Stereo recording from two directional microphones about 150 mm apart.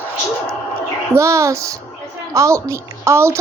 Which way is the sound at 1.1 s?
20° right (ahead or behind).